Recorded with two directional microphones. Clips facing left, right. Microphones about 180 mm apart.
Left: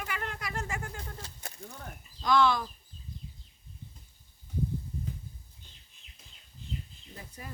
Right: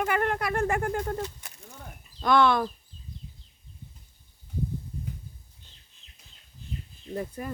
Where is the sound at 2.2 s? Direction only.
60° right (ahead or behind).